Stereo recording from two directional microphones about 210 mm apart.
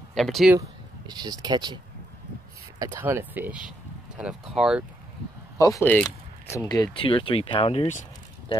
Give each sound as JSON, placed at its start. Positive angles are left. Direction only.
{"t": 0.1, "sound": "speech", "side_deg": 0}
{"t": 0.6, "sound": "speech", "side_deg": -20}
{"t": 2.8, "sound": "speech", "side_deg": -10}
{"t": 5.6, "sound": "speech", "side_deg": 15}